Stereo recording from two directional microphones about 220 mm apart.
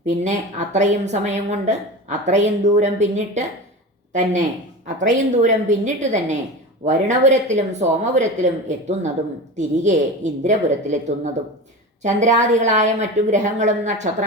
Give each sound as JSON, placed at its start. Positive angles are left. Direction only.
{"t": 0.0, "sound": "a woman's voice", "side_deg": -35}
{"t": 12.0, "sound": "a woman's voice", "side_deg": -35}